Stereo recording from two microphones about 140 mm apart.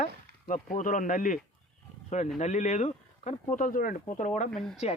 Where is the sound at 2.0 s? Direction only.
55° left (ahead or behind); by 4.3 s 80° left.